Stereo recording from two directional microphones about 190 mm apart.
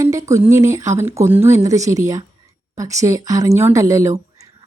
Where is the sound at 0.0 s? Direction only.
15° right (ahead or behind).